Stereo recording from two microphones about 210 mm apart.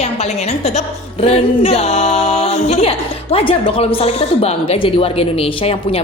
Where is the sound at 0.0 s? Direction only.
30° left (ahead or behind).